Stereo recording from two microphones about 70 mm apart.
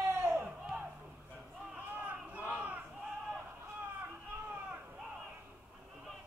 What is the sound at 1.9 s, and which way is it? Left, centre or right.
Crowd, right.